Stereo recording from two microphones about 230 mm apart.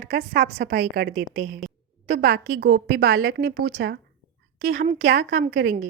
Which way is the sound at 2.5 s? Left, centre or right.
Right.